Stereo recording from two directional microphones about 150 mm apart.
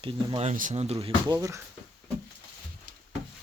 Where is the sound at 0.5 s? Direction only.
50° right (ahead or behind).